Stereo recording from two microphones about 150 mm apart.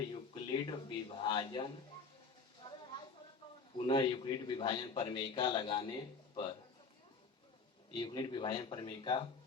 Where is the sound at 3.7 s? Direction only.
30° left (ahead or behind).